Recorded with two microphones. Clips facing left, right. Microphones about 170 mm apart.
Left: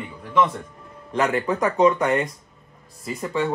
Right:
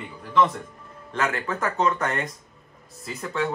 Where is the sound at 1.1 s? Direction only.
15° left (ahead or behind).